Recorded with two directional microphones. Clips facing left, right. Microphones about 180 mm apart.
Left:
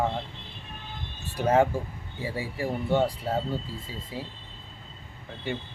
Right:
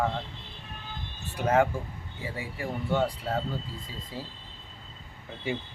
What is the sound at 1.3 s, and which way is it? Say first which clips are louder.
Speech: left 2 dB; 30° left (ahead or behind).